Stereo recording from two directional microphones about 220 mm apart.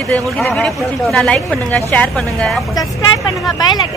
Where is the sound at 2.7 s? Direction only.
15° left (ahead or behind).